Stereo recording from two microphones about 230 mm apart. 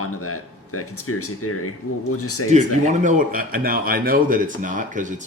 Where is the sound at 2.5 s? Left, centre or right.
Right.